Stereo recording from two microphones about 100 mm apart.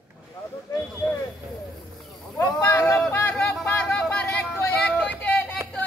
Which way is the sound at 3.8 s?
10° left (ahead or behind).